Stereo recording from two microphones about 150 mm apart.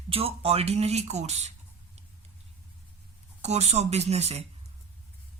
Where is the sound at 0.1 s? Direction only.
40° right (ahead or behind).